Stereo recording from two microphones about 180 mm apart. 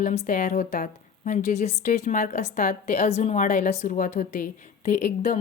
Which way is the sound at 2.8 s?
35° left (ahead or behind).